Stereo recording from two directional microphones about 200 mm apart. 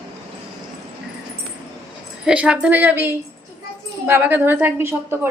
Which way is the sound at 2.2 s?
5° right (ahead or behind).